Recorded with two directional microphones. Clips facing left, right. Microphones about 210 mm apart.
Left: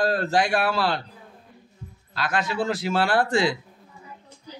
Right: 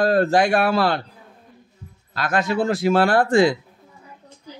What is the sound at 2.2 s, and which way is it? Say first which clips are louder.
A man's voice: right 5 dB; 50° right (ahead or behind).